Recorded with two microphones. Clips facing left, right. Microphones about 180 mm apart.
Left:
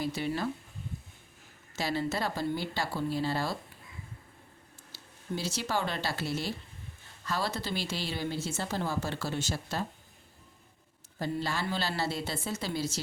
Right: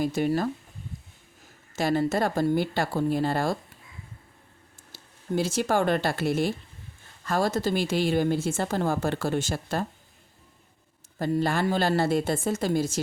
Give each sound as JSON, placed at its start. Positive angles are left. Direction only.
{"t": 0.0, "sound": "a woman's voice", "side_deg": -45}
{"t": 1.7, "sound": "a woman's voice", "side_deg": -50}
{"t": 4.9, "sound": "a woman's voice", "side_deg": -50}
{"t": 11.2, "sound": "a woman's voice", "side_deg": -50}